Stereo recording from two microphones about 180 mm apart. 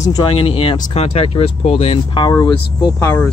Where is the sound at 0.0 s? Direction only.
25° left (ahead or behind).